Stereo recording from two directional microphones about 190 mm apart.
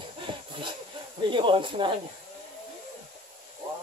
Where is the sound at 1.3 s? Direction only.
25° right (ahead or behind).